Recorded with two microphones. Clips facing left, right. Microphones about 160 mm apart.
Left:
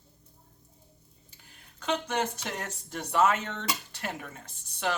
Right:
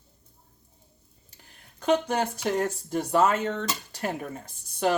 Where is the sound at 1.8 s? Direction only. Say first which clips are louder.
Right 6 dB; 40° right (ahead or behind).